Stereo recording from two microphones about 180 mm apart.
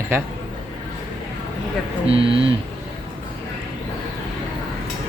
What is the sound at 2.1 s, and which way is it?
Speech, 30° right (ahead or behind).